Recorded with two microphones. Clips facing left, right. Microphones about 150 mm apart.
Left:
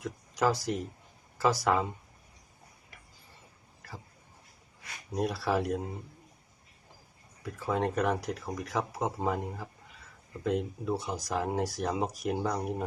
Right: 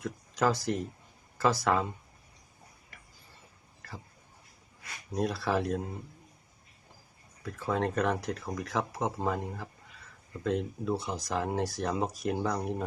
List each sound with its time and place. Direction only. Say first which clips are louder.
0.0 s a sound: even; 15° left (ahead or behind)
1.4 s speech: even; 15° left (ahead or behind)
5.1 s speech: even; 10° left (ahead or behind)
7.4 s speech: even; 15° left (ahead or behind)